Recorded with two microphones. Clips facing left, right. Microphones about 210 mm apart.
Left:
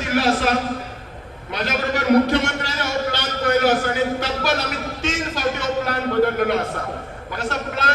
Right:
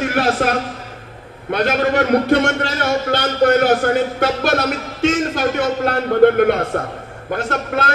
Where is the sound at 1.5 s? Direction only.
55° right (ahead or behind).